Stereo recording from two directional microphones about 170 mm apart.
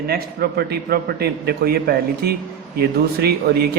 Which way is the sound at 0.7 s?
70° right (ahead or behind).